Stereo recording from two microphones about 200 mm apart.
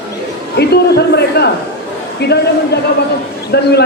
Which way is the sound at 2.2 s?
55° left (ahead or behind).